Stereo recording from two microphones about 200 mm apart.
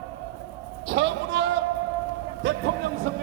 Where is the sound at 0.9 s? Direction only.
65° right (ahead or behind).